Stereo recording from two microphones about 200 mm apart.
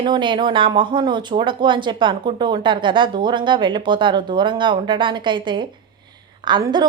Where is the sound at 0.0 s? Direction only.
25° right (ahead or behind).